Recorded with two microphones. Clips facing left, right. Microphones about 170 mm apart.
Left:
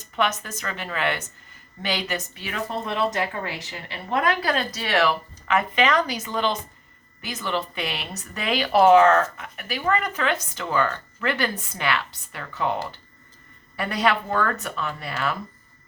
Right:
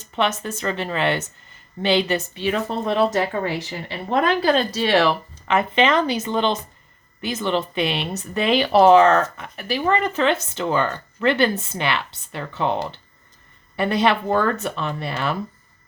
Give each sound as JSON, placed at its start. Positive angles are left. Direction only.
{"t": 0.2, "sound": "a woman's voice", "side_deg": -30}